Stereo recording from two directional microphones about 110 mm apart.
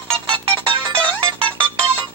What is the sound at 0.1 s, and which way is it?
Music, 50° right (ahead or behind).